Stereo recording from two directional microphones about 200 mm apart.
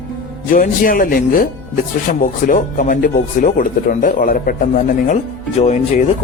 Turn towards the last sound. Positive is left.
turn(degrees=35)  # may be behind; listen again after turning